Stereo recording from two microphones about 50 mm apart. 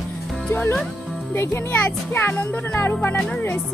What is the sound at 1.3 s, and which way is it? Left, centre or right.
Speech, left.